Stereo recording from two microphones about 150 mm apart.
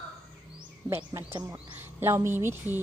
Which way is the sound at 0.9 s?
15° right (ahead or behind).